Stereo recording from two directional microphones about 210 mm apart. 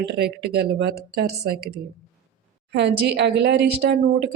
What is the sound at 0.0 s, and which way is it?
A woman's voice, 50° right (ahead or behind).